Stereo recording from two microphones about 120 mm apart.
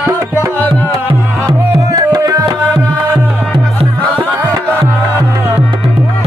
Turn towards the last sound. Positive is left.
turn(degrees=-20)  # may be behind; listen again after turning